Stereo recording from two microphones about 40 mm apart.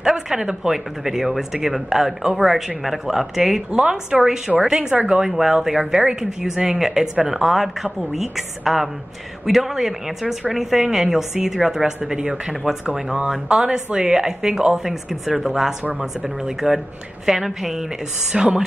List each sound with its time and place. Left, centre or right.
0.0 s speech: centre
3.7 s speech: centre
14.2 s speech: centre
18.3 s speech: right